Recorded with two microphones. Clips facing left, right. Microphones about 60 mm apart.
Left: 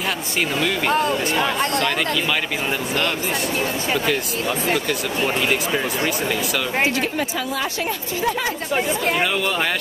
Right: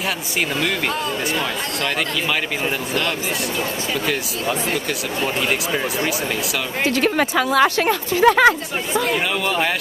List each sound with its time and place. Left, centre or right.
7.0 s speech: right